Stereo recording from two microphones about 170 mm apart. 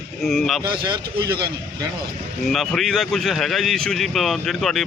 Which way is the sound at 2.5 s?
Centre (ahead or behind).